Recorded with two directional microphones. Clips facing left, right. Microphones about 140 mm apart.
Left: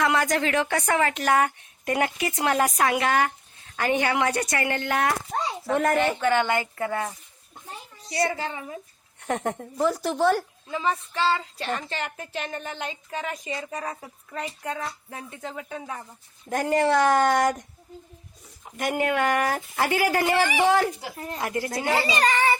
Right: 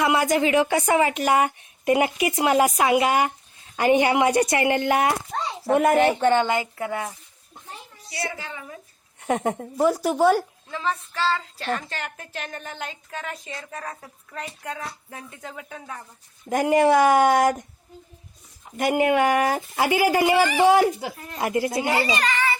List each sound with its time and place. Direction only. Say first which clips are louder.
0.0 s speech: right 3 dB; 10° right (ahead or behind)
6.0 s a woman's voice: right 4 dB; 35° right (ahead or behind); by 7.1 s 10° right (ahead or behind)
8.1 s a woman's voice: left 6 dB; 40° left (ahead or behind)
8.4 s a woman's voice: left 4 dB; 25° left (ahead or behind)
9.2 s speech: right 4 dB; 10° right (ahead or behind)
10.7 s speech: left 2 dB; 5° left (ahead or behind)
16.5 s speech: right 4 dB; 10° right (ahead or behind)
18.8 s speech: right 5 dB; 5° right (ahead or behind)
22.1 s speech: left 2 dB; 40° left (ahead or behind)